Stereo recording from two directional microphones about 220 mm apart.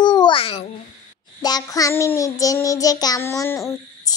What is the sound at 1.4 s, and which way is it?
Child singing, 15° left (ahead or behind).